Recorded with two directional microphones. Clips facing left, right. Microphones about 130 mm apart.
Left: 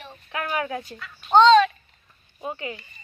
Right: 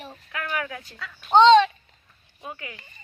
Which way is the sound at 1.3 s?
20° right (ahead or behind).